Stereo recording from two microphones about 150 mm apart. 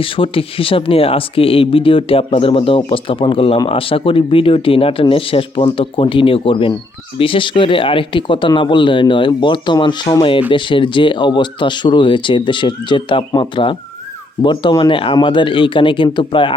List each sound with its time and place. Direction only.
0.0 s speech: 35° left (ahead or behind)